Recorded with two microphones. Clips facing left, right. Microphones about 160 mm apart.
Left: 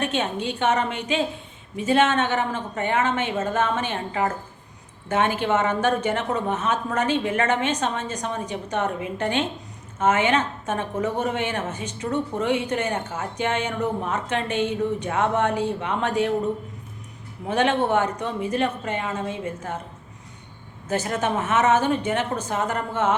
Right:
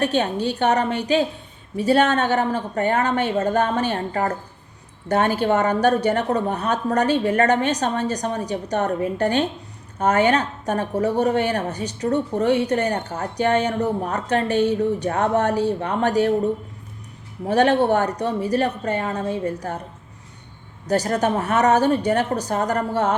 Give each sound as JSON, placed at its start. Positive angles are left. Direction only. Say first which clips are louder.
{"t": 0.0, "sound": "a woman's voice", "louder": "right 4 dB", "side_deg": -35}
{"t": 17.5, "sound": "a woman's voice", "louder": "right 4 dB", "side_deg": -35}
{"t": 20.8, "sound": "a woman's voice", "louder": "right 4 dB", "side_deg": -35}